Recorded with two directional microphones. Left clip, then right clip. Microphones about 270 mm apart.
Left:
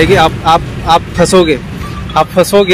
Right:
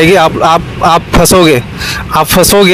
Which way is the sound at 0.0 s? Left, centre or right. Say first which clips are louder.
Right 2 dB; right.